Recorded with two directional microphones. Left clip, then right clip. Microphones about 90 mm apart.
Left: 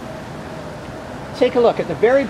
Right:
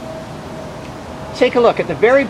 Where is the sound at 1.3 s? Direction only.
20° right (ahead or behind).